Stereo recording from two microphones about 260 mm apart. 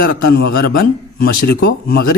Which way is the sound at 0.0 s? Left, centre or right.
Left.